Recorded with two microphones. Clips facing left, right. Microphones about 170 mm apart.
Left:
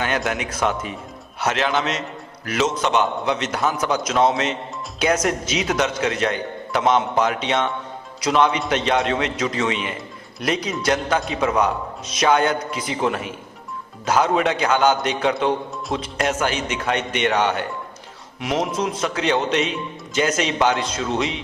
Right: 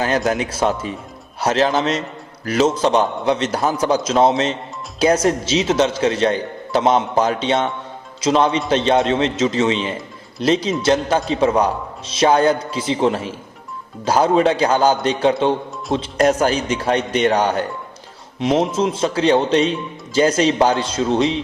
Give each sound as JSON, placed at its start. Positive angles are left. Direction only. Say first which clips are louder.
{"t": 0.3, "sound": "a man's voice", "louder": "right 4 dB", "side_deg": -30}
{"t": 18.3, "sound": "a man's voice", "louder": "right 5 dB", "side_deg": -25}